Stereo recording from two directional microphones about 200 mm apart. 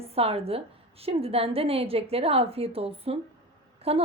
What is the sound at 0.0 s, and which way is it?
A woman's voice, 30° right (ahead or behind).